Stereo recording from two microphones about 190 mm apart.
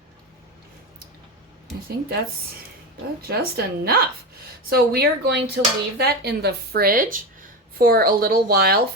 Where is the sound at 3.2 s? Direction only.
55° right (ahead or behind).